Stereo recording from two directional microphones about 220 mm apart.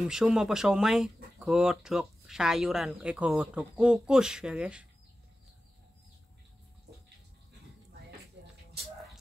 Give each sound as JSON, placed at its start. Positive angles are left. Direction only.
{"t": 0.1, "sound": "speech", "side_deg": -5}